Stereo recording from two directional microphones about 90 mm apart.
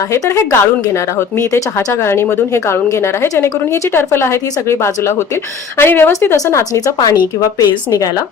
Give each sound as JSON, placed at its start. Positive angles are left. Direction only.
{"t": 0.1, "sound": "a woman's voice", "side_deg": 30}
{"t": 2.0, "sound": "a woman's voice", "side_deg": 30}
{"t": 3.9, "sound": "a woman's voice", "side_deg": 30}
{"t": 6.3, "sound": "speech", "side_deg": 35}